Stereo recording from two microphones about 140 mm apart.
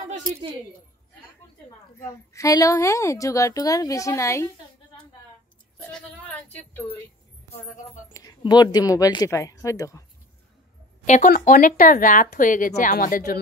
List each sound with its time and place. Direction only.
2.0 s a woman's voice: 20° left (ahead or behind)
5.8 s speech: 10° left (ahead or behind)
8.1 s a woman's voice: 25° left (ahead or behind)
11.1 s speech: 65° left (ahead or behind); by 13.4 s 85° left